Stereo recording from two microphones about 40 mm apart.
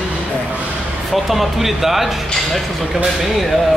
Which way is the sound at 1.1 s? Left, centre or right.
Centre.